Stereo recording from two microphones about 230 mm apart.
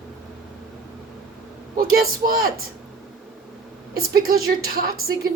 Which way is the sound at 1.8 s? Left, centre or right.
Right.